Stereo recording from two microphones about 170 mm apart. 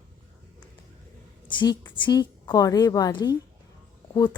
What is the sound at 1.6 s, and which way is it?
A woman's voice, 30° left (ahead or behind).